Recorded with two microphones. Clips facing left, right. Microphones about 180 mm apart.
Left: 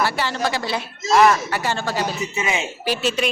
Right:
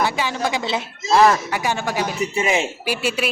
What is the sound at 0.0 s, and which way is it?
Speech, 15° right (ahead or behind).